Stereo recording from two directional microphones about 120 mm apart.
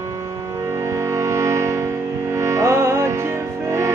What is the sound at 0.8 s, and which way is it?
Music, 25° right (ahead or behind).